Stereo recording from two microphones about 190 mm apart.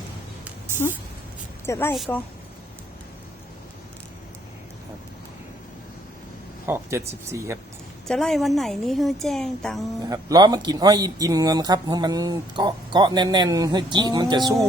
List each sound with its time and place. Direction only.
1.6 s a woman's voice: 15° left (ahead or behind)
6.7 s speech: 15° right (ahead or behind)
8.0 s speech: 5° left (ahead or behind)
10.1 s speech: 20° right (ahead or behind)